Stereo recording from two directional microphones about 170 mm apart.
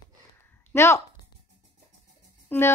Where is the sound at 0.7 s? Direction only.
15° left (ahead or behind).